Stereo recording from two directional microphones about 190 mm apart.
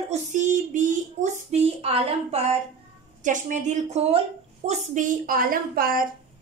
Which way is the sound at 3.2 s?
40° right (ahead or behind).